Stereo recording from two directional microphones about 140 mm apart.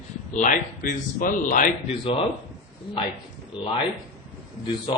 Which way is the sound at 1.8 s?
45° left (ahead or behind).